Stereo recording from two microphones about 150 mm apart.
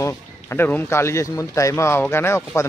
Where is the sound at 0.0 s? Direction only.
15° left (ahead or behind).